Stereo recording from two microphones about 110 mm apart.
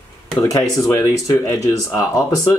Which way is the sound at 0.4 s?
30° left (ahead or behind).